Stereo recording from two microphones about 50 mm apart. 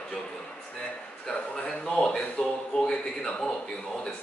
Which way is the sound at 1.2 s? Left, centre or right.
Centre.